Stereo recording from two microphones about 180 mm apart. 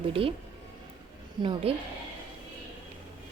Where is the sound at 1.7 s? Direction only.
30° right (ahead or behind).